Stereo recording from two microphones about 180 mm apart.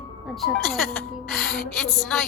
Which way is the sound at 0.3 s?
Centre (ahead or behind).